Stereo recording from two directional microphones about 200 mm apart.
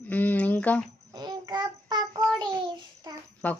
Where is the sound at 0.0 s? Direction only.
10° left (ahead or behind).